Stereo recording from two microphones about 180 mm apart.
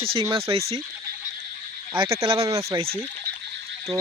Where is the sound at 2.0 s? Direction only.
15° right (ahead or behind).